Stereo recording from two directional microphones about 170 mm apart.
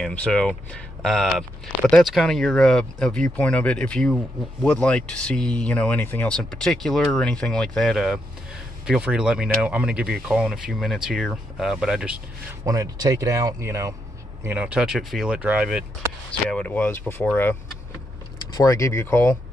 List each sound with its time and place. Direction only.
0.0 s speech: 5° left (ahead or behind)
12.6 s speech: 20° right (ahead or behind)
16.3 s speech: 5° left (ahead or behind)